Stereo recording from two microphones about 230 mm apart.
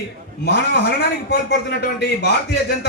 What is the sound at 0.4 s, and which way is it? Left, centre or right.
A man's voice, left.